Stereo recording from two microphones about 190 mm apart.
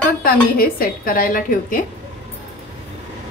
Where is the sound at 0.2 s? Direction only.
50° left (ahead or behind).